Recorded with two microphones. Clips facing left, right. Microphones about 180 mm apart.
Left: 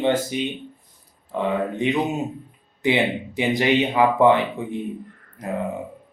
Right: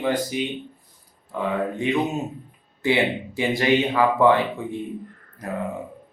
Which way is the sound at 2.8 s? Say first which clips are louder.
Left 1 dB; 20° left (ahead or behind).